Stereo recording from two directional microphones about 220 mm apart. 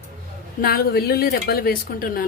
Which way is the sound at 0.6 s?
45° left (ahead or behind).